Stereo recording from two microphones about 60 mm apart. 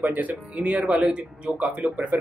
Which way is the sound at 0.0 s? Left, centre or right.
Right.